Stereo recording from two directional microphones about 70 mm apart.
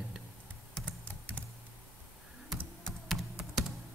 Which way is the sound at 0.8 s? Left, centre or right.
Left.